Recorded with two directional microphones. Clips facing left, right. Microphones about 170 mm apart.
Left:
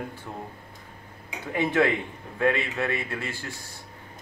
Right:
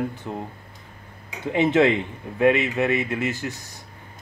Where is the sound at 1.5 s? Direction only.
25° right (ahead or behind).